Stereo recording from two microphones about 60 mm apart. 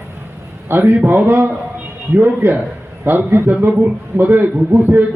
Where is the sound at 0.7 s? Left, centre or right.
Right.